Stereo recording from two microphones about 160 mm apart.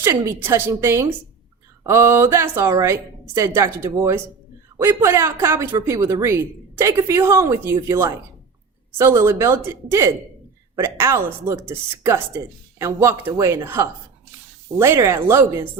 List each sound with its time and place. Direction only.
0.0 s speech: 15° right (ahead or behind)